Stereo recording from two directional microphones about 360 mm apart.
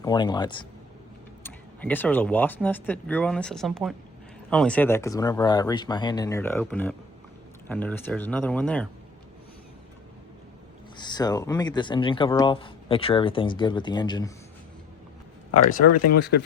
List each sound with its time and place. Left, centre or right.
0.0 s speech: centre
10.9 s speech: centre
15.5 s speech: left
16.1 s speech: left